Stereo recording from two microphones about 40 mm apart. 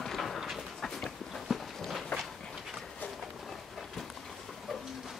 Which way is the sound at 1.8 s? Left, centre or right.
Centre.